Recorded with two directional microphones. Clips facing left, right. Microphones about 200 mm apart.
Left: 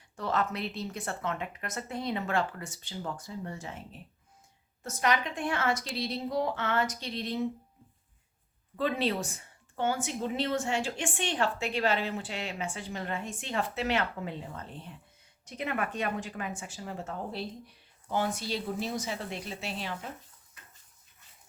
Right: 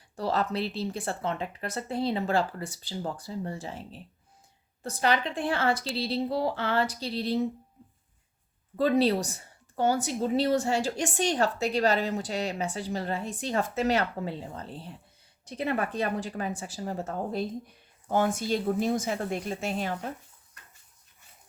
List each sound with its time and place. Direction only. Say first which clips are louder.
0.2 s a woman's voice: right 3 dB; 35° right (ahead or behind)
8.7 s a woman's voice: right 6 dB; 40° right (ahead or behind)